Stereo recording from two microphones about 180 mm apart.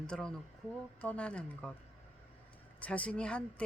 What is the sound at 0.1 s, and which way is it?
A woman's voice, 5° left (ahead or behind).